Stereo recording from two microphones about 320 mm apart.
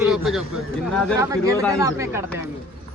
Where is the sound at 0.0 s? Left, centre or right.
Centre.